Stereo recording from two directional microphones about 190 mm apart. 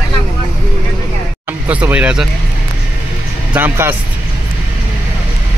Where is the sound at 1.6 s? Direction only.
5° right (ahead or behind).